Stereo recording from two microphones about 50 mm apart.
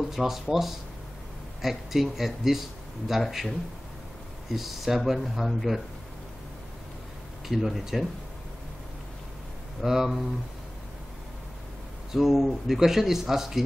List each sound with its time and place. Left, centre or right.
0.0 s speech: centre
7.4 s speech: centre
9.8 s speech: centre
12.1 s speech: centre